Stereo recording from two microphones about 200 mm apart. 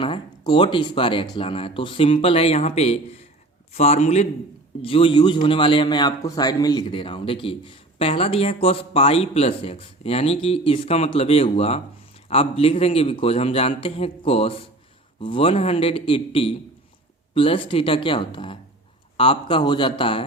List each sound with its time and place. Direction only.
0.0 s a man's voice: 25° left (ahead or behind)